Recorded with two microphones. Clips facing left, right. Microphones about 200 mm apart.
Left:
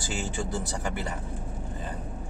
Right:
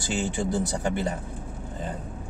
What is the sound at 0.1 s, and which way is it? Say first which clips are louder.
Speech: right 5 dB; 20° right (ahead or behind).